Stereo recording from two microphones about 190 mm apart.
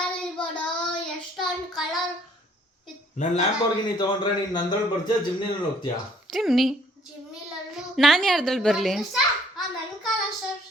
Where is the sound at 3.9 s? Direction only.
20° left (ahead or behind).